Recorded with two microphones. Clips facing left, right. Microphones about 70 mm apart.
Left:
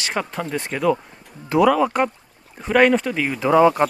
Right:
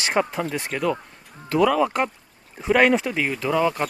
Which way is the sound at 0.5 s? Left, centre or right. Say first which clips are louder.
Left 6 dB; centre.